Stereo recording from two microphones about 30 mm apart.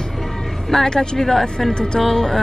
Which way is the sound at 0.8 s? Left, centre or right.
Left.